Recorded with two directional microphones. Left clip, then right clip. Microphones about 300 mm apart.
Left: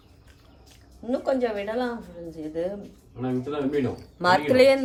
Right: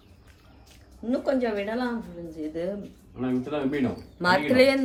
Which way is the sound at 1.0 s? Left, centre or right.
Centre.